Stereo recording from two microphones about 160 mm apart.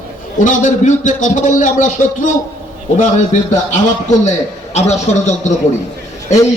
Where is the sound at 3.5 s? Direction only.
50° left (ahead or behind).